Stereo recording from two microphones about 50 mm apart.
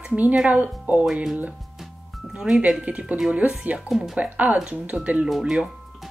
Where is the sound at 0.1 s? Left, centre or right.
Right.